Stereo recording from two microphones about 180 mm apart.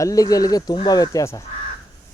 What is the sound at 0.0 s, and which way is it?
Speech, 20° left (ahead or behind).